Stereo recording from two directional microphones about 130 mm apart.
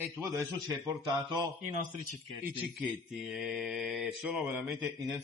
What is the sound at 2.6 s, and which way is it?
Mantra, centre (ahead or behind).